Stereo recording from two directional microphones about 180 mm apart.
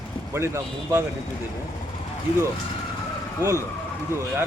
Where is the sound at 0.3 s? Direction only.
15° right (ahead or behind).